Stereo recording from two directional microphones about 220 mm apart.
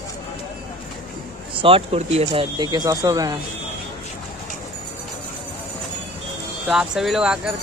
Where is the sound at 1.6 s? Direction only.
25° right (ahead or behind).